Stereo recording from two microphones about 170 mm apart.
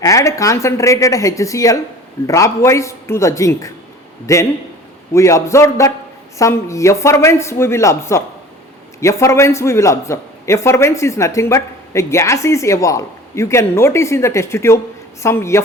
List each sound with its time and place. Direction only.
0.0 s a man's voice: 20° left (ahead or behind)